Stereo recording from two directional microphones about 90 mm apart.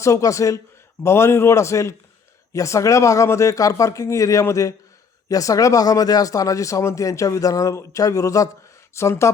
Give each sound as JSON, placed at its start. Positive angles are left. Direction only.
{"t": 0.0, "sound": "speech", "side_deg": 35}